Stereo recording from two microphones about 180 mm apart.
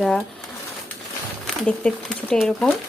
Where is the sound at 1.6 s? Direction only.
5° left (ahead or behind).